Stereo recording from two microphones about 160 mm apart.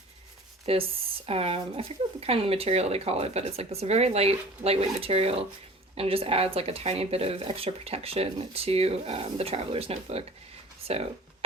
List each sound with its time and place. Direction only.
0.6 s speech: 35° right (ahead or behind)